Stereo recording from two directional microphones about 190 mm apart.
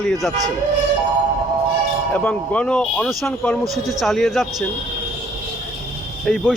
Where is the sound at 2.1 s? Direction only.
5° left (ahead or behind).